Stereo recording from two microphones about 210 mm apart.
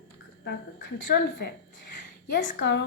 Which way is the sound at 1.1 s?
55° left (ahead or behind).